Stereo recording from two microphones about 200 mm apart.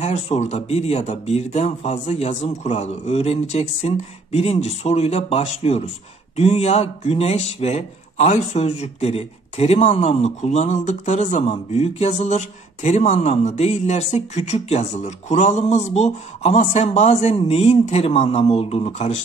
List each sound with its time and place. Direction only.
0.0 s speech: 35° left (ahead or behind)